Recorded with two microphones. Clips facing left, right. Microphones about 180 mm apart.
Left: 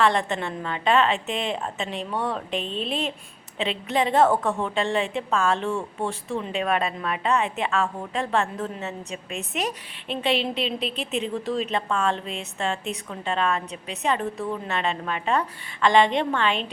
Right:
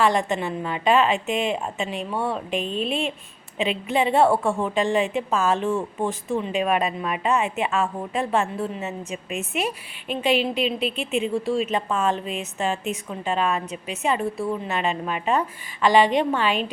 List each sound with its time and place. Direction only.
0.0 s a woman's voice: 15° right (ahead or behind)
3.9 s a woman's voice: 5° right (ahead or behind)
9.0 s a woman's voice: 35° left (ahead or behind)
10.2 s a woman's voice: 10° right (ahead or behind)
10.8 s a woman's voice: 35° left (ahead or behind)
11.3 s a woman's voice: 10° right (ahead or behind)